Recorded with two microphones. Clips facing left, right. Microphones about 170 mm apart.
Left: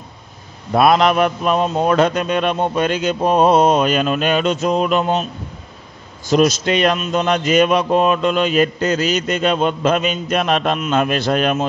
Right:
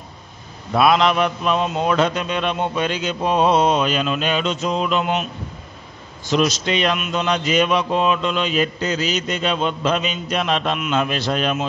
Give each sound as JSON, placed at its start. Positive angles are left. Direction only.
{"t": 0.7, "sound": "a man's voice", "side_deg": 45}
{"t": 6.2, "sound": "a man's voice", "side_deg": 45}